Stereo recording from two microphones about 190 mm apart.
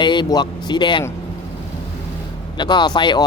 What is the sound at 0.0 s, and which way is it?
A man's voice, 25° left (ahead or behind).